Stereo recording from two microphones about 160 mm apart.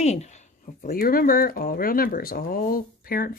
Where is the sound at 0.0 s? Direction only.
45° left (ahead or behind).